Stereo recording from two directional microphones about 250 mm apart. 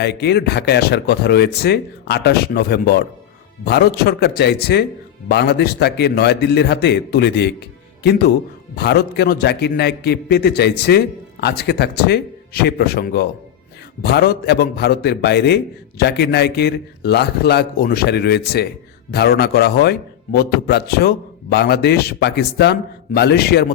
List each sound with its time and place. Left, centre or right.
0.0 s a man's voice: left
8.7 s a man's voice: left